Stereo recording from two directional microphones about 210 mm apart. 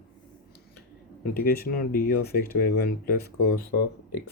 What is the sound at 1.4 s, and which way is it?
Speech, 45° left (ahead or behind).